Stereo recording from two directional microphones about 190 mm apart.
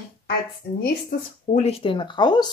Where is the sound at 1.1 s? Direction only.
50° left (ahead or behind).